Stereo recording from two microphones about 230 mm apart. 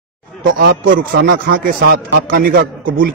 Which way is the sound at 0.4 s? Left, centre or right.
Right.